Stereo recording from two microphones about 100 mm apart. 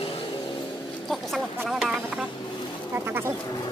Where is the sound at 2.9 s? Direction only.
25° right (ahead or behind).